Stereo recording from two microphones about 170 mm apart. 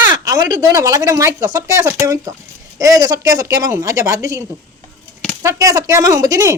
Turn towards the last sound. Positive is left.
turn(degrees=-20)  # may be behind; listen again after turning